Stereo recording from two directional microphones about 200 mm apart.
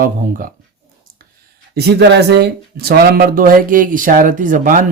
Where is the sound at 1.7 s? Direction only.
55° right (ahead or behind).